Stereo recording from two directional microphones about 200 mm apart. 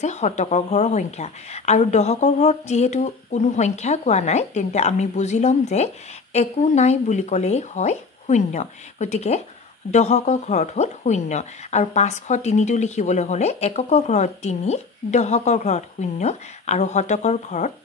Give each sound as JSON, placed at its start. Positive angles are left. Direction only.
{"t": 0.0, "sound": "a woman's voice", "side_deg": 35}